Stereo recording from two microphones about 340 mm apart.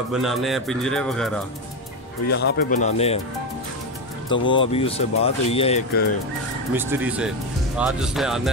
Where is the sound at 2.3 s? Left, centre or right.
Left.